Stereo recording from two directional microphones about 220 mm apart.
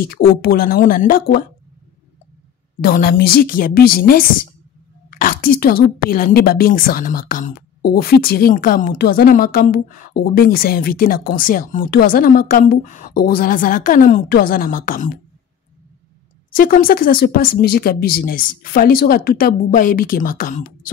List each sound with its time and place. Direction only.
0.0 s a woman's voice: 45° left (ahead or behind)
2.8 s speech: 40° left (ahead or behind)
16.5 s speech: 40° left (ahead or behind)